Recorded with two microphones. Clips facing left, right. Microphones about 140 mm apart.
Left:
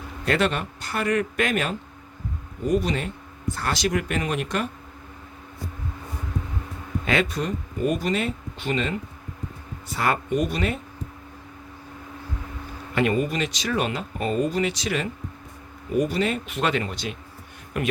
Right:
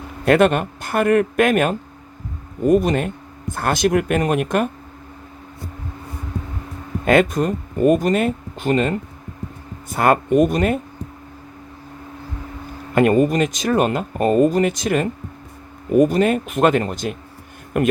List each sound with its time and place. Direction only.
0.3 s speech: 50° right (ahead or behind)
7.0 s speech: 50° right (ahead or behind)
12.9 s speech: 45° right (ahead or behind)